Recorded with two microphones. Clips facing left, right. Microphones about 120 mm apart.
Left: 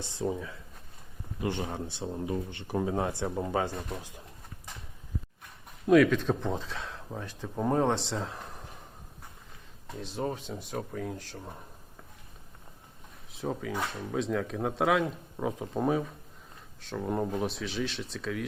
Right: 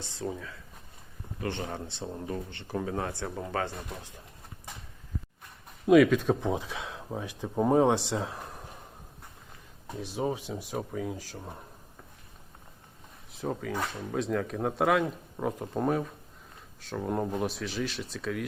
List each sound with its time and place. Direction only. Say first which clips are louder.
0.0 s speech: left 3 dB; 20° left (ahead or behind)
5.8 s speech: right 2 dB; 5° right (ahead or behind)
9.8 s speech: right 2 dB; 10° right (ahead or behind)
13.3 s speech: right 1 dB; centre (ahead or behind)